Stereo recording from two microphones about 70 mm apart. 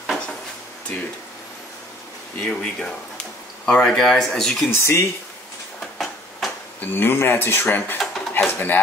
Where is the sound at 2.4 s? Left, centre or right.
Centre.